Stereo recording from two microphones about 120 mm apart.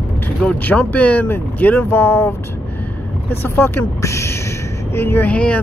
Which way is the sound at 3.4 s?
20° left (ahead or behind).